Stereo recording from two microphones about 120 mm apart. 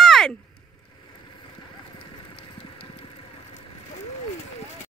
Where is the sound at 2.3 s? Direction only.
50° left (ahead or behind).